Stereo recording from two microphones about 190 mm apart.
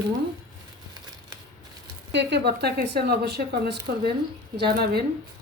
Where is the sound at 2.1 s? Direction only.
65° right (ahead or behind).